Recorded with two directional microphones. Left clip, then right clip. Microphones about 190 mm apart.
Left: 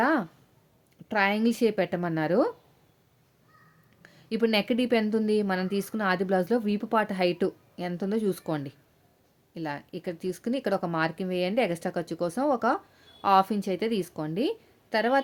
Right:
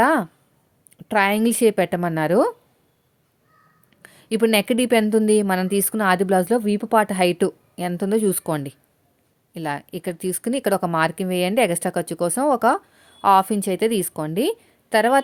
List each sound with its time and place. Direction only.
0.0 s a sound: 45° right (ahead or behind)
1.0 s speech: 45° right (ahead or behind)
4.0 s speech: 45° right (ahead or behind)